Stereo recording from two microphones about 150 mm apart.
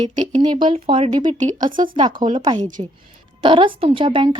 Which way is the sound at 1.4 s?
55° right (ahead or behind).